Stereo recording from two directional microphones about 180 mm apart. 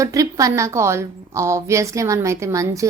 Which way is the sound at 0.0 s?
20° right (ahead or behind).